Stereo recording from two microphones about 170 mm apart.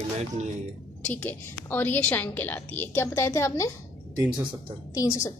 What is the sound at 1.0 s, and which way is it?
A woman's voice, 10° left (ahead or behind).